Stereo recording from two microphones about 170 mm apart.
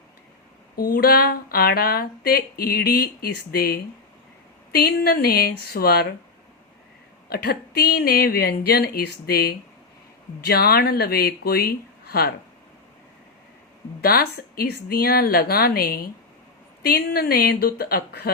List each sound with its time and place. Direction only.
0.9 s speech: 65° left (ahead or behind)
7.3 s speech: 65° left (ahead or behind)
14.0 s speech: 65° left (ahead or behind)